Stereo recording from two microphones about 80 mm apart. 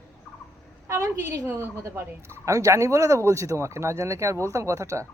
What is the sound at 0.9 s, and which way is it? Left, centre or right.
A woman's voice, right.